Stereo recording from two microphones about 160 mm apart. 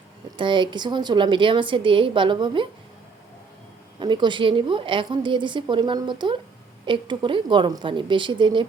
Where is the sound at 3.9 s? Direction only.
30° right (ahead or behind).